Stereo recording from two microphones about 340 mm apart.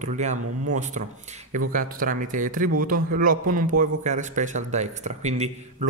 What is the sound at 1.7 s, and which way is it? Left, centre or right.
Speech, right.